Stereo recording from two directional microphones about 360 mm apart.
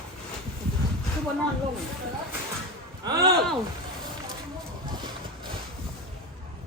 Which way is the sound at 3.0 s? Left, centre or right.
Centre.